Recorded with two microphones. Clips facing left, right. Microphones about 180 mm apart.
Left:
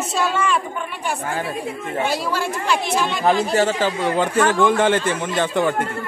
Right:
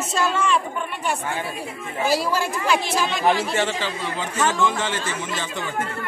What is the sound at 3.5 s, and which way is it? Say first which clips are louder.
Speech: left 6 dB; 45° left (ahead or behind).